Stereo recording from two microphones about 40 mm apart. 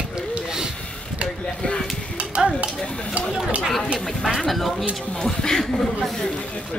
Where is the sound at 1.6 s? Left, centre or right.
Centre.